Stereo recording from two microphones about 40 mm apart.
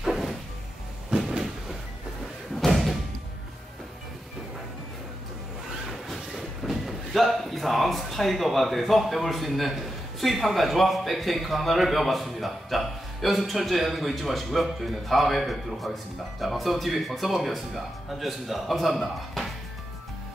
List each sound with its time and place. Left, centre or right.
1.1 s cupboard open or close: right
2.5 s thump: centre
6.0 s a man's voice: centre
19.4 s music: centre